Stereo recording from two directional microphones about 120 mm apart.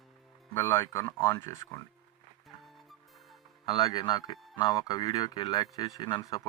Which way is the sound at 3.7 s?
35° left (ahead or behind).